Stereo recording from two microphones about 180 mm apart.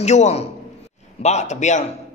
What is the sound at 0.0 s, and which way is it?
Speech, 40° left (ahead or behind).